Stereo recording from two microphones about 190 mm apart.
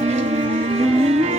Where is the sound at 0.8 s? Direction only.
35° right (ahead or behind).